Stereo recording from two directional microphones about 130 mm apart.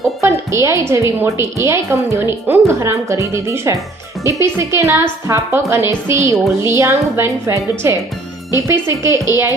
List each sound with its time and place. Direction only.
0.2 s a woman's voice: 20° right (ahead or behind)